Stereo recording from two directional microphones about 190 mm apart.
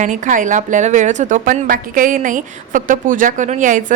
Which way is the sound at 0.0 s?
40° right (ahead or behind).